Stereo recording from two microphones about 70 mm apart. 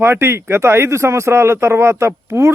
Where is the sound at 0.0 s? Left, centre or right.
Right.